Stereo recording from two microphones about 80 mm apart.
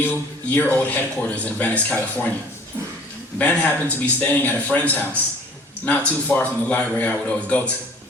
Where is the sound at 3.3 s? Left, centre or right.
Centre.